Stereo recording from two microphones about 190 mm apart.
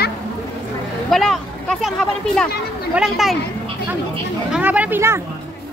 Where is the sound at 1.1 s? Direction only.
Centre (ahead or behind).